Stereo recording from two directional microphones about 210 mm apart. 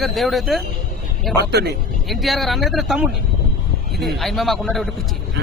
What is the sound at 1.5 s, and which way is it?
Speech, 50° right (ahead or behind).